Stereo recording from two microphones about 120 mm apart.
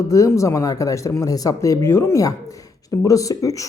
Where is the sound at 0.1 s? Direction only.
25° left (ahead or behind).